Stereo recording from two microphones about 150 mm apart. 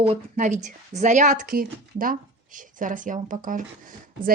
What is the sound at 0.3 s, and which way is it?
Speech, 55° right (ahead or behind).